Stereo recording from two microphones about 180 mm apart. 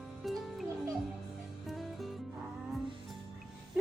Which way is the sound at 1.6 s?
Centre (ahead or behind).